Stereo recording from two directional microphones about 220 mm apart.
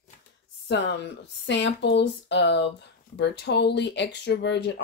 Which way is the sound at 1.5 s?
55° left (ahead or behind).